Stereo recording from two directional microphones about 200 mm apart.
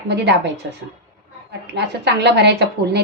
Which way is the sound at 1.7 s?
55° right (ahead or behind).